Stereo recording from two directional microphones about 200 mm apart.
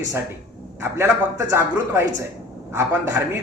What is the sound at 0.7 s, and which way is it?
A man's voice, 15° right (ahead or behind).